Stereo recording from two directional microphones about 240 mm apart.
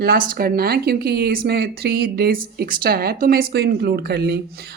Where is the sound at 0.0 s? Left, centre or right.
Right.